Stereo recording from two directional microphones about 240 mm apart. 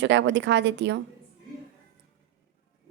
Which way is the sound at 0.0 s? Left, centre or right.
Right.